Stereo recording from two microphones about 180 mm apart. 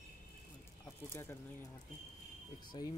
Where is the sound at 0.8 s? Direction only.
15° left (ahead or behind).